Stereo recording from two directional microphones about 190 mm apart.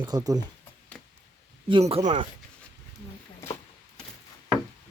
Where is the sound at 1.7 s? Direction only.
30° right (ahead or behind).